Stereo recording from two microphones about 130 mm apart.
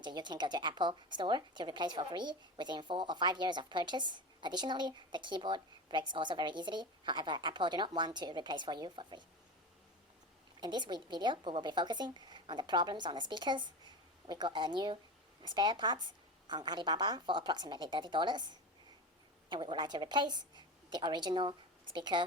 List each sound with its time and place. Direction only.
0.0 s speech: 35° right (ahead or behind)
10.6 s a woman's voice: 35° right (ahead or behind)